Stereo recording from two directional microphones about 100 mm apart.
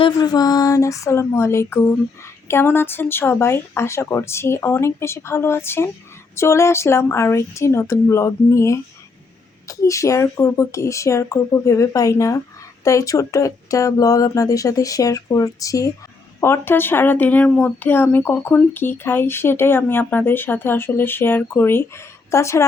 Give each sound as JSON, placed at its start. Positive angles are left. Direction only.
{"t": 0.2, "sound": "speech", "side_deg": 40}
{"t": 16.4, "sound": "speech", "side_deg": 25}